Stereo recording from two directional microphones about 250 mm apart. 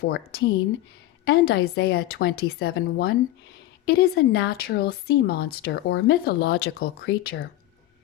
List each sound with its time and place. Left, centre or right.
0.0 s speech: left